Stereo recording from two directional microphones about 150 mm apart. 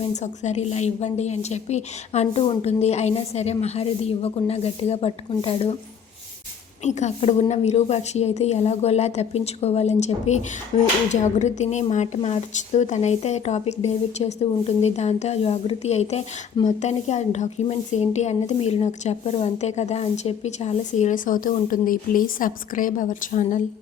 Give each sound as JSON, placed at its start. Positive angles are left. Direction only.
{"t": 0.1, "sound": "a woman's voice", "side_deg": 50}
{"t": 6.8, "sound": "a woman's voice", "side_deg": 50}